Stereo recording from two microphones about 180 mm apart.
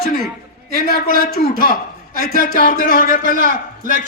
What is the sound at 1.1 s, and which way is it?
Speech, 55° right (ahead or behind).